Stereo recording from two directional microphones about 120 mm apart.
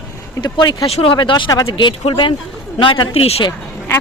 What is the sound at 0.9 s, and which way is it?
Speech, 60° left (ahead or behind).